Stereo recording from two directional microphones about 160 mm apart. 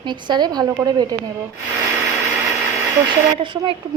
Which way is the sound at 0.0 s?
30° right (ahead or behind).